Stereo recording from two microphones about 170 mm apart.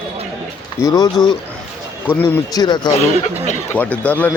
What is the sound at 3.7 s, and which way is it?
Speech, 10° left (ahead or behind).